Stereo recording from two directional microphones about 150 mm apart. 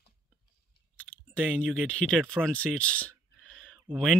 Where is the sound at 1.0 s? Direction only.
5° left (ahead or behind).